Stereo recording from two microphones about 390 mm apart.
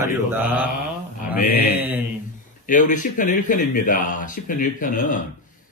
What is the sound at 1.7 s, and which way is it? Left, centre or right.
Mantra, centre.